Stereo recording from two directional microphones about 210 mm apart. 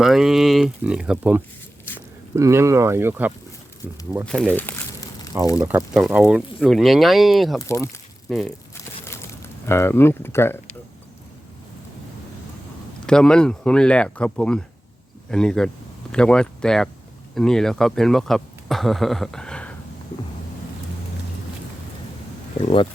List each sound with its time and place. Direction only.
0.0 s speech: centre (ahead or behind)
4.5 s crumpling: 10° left (ahead or behind)
5.5 s speech: 5° right (ahead or behind)
7.6 s speech: 15° left (ahead or behind)
8.3 s speech: centre (ahead or behind)
8.7 s a sound: 10° left (ahead or behind)
9.6 s speech: 10° left (ahead or behind)
13.1 s speech: 5° left (ahead or behind)
22.6 s speech: 25° left (ahead or behind)